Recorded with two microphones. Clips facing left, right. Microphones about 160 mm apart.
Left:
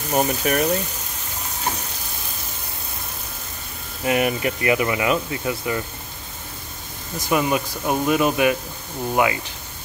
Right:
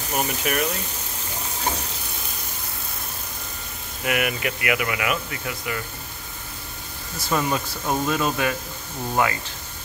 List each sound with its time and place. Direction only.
0.1 s speech: 30° left (ahead or behind)
4.0 s speech: 30° left (ahead or behind)
7.2 s speech: 15° left (ahead or behind)